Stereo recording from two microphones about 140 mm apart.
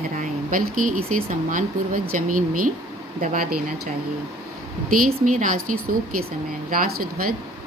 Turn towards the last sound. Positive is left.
turn(degrees=-90)